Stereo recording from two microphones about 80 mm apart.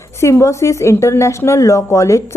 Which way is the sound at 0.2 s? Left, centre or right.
Left.